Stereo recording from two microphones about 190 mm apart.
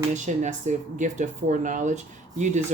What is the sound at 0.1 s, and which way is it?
Speech, 40° right (ahead or behind).